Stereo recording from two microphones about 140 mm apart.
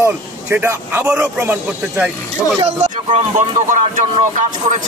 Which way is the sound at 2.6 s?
50° right (ahead or behind).